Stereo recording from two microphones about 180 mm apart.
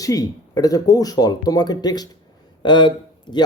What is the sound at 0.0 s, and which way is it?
Speech, 20° left (ahead or behind).